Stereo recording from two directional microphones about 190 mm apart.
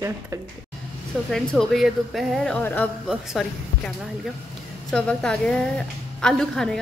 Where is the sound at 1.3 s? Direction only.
Centre (ahead or behind).